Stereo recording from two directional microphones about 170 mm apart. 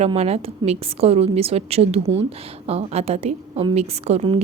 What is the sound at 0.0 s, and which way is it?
A woman's voice, 35° right (ahead or behind).